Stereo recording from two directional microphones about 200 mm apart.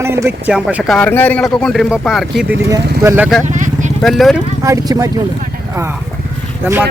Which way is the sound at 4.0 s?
Centre (ahead or behind).